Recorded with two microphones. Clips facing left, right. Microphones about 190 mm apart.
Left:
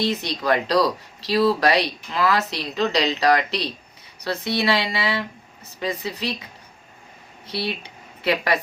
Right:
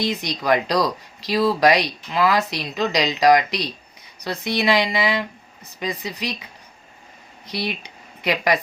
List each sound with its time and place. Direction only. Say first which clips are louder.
0.0 s speech: even; 15° right (ahead or behind)
7.4 s speech: even; 15° right (ahead or behind)